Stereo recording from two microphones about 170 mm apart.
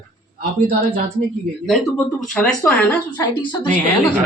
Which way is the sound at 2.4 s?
10° left (ahead or behind).